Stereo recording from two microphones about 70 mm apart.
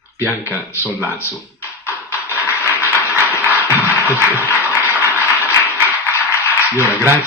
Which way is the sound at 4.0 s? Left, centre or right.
Left.